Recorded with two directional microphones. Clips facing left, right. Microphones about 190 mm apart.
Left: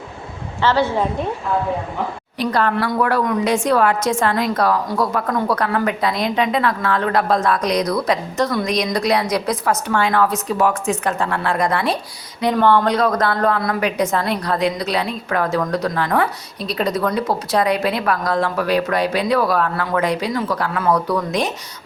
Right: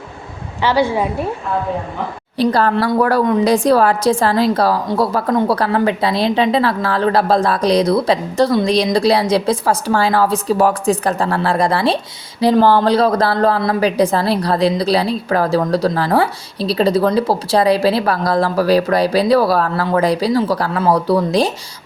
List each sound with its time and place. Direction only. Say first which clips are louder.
0.6 s a woman's voice: right 2 dB; 10° right (ahead or behind)
2.4 s a woman's voice: right 4 dB; 35° right (ahead or behind)